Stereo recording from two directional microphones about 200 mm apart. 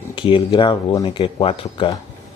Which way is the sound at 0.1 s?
25° left (ahead or behind).